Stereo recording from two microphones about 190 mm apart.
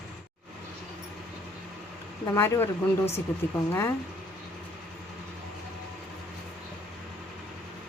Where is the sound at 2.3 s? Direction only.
15° left (ahead or behind).